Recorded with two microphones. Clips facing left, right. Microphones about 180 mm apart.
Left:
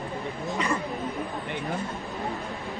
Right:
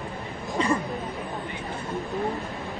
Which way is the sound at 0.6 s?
30° right (ahead or behind).